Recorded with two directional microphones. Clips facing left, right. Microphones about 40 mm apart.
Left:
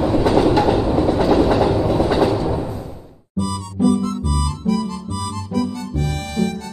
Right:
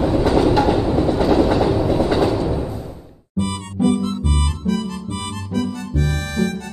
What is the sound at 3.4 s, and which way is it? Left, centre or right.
Music, right.